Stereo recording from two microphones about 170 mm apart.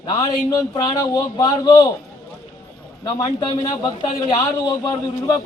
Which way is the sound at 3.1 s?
25° left (ahead or behind).